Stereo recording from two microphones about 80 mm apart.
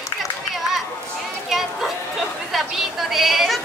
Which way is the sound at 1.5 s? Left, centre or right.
Centre.